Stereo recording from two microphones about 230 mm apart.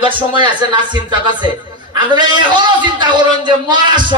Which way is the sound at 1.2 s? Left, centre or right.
Centre.